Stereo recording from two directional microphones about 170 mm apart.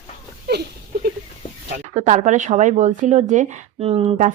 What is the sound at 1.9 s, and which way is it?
Speech, 45° right (ahead or behind).